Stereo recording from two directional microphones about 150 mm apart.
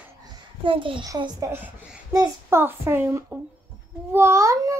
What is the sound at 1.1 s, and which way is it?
A child's voice, 20° right (ahead or behind).